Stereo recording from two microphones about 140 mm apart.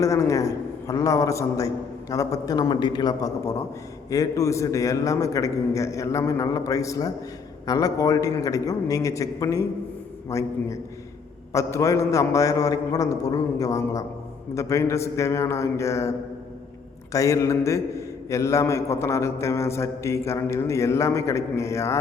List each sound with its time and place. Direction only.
0.0 s a man's voice: 20° left (ahead or behind)